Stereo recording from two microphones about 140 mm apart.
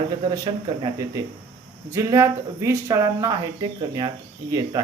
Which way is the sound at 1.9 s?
20° right (ahead or behind).